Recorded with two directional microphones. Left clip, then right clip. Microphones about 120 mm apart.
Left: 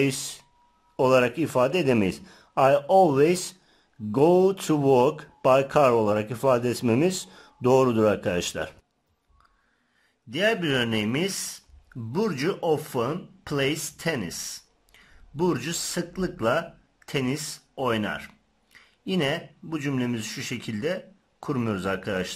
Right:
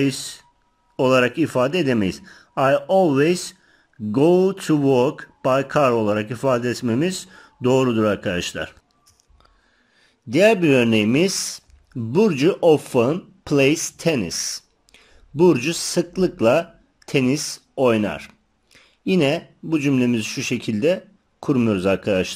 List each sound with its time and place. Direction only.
0.0 s speech: 10° left (ahead or behind)
0.9 s speech: centre (ahead or behind)
10.3 s speech: 30° right (ahead or behind)